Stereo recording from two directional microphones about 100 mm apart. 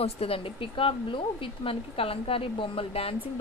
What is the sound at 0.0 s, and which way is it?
Speech, 70° left (ahead or behind).